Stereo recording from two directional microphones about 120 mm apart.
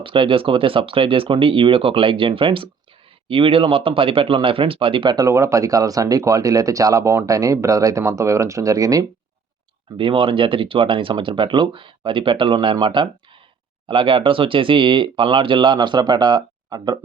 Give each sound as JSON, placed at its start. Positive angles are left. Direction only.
{"t": 0.0, "sound": "speech", "side_deg": -45}
{"t": 10.0, "sound": "speech", "side_deg": -50}